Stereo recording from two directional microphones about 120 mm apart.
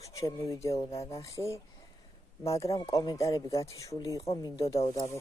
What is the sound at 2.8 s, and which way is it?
Speech, 30° left (ahead or behind).